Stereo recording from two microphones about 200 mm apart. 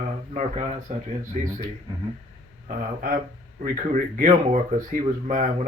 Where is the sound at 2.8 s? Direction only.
45° right (ahead or behind).